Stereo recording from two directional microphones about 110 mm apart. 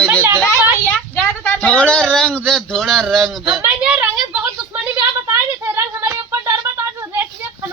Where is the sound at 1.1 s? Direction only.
10° left (ahead or behind).